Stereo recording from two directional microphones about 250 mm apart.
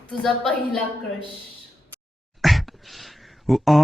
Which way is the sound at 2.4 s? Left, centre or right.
Centre.